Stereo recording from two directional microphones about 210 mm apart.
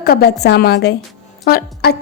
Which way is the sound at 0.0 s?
45° left (ahead or behind).